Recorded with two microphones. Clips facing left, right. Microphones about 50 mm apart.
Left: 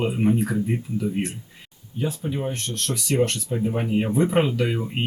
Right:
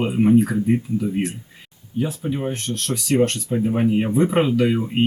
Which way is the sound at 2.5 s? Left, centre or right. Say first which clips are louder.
Right 3 dB; centre.